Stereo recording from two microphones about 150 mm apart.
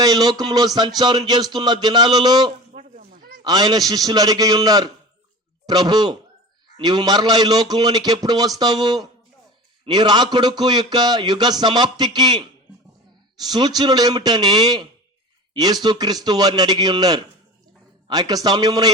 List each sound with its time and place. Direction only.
0.0 s a man's voice: 25° right (ahead or behind)